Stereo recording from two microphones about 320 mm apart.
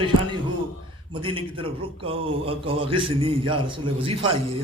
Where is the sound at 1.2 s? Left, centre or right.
Centre.